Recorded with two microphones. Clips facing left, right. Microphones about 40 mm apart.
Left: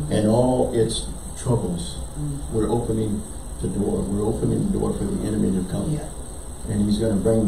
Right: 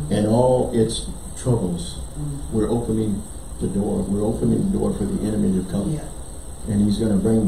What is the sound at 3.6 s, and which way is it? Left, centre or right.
Speech, centre.